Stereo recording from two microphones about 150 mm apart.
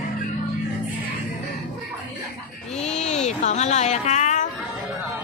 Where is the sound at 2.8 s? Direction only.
45° left (ahead or behind).